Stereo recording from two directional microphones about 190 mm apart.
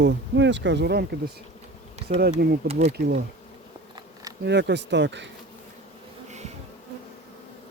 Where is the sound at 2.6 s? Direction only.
35° right (ahead or behind).